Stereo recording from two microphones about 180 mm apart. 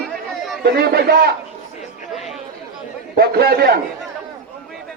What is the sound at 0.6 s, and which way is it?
Speech, 60° right (ahead or behind).